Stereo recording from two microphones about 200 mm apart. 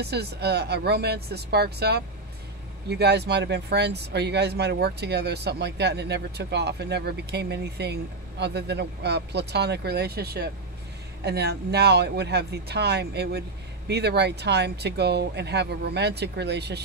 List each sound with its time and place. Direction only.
0.0 s speech: 55° right (ahead or behind)